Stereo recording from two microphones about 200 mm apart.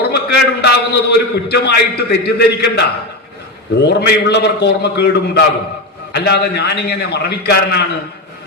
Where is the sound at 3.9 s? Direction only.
55° left (ahead or behind).